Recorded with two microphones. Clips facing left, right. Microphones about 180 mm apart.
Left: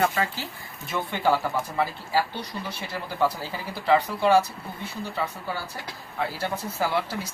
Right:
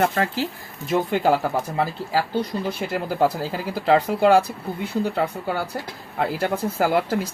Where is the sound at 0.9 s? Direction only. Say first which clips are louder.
Right 5 dB; 40° right (ahead or behind).